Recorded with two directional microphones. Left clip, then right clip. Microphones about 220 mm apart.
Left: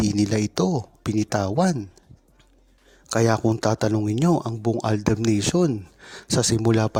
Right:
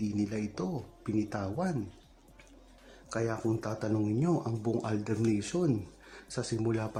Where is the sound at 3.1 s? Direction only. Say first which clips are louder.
Left 12 dB; 40° left (ahead or behind).